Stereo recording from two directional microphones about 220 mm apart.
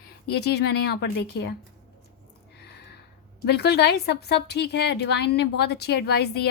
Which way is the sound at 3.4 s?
45° left (ahead or behind).